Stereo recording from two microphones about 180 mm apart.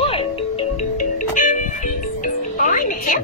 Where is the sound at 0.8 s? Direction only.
45° left (ahead or behind).